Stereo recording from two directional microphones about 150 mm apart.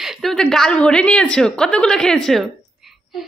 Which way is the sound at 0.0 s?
Centre (ahead or behind).